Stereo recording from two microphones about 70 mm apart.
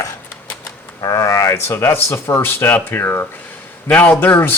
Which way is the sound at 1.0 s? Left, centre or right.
Left.